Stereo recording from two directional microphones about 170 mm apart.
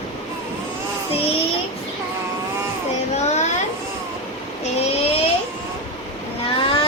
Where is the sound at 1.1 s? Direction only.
35° left (ahead or behind).